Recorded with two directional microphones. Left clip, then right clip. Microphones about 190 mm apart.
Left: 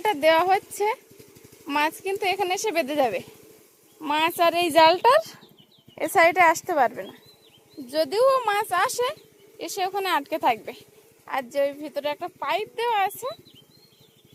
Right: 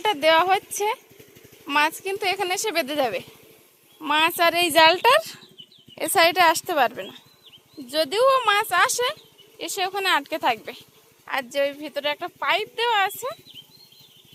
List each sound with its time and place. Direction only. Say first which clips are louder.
0.0 s a woman's voice: right 1 dB; 15° left (ahead or behind)